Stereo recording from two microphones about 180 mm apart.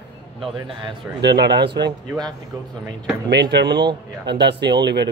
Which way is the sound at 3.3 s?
70° right (ahead or behind).